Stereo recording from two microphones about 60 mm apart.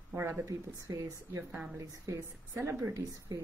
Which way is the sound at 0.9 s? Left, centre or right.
Right.